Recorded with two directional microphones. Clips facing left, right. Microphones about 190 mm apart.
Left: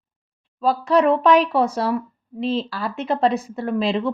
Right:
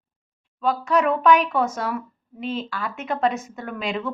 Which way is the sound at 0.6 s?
35° left (ahead or behind).